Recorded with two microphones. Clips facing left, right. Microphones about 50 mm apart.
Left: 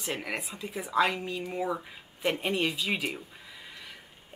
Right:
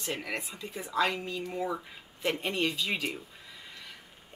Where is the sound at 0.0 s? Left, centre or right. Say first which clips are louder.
Left 1 dB; centre.